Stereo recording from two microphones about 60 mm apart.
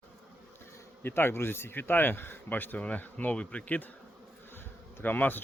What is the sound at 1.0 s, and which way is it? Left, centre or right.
Speech, left.